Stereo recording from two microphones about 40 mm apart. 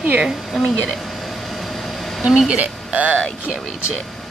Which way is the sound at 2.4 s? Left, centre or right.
Right.